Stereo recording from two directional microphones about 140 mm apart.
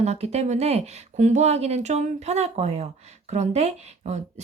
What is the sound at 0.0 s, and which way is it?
A woman's voice, 50° right (ahead or behind).